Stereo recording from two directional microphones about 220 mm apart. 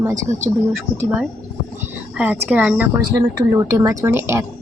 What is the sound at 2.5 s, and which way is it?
Speech, 5° right (ahead or behind).